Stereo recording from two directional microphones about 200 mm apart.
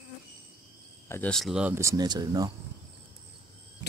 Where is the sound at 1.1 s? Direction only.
5° left (ahead or behind); by 2.5 s 20° right (ahead or behind).